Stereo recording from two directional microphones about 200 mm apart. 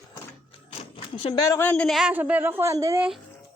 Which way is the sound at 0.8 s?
30° left (ahead or behind).